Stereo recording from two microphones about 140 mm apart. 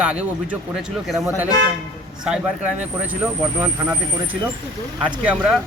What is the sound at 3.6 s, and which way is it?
Speech, 15° right (ahead or behind).